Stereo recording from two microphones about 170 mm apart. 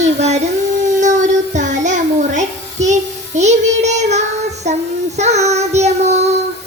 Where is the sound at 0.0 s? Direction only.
40° right (ahead or behind).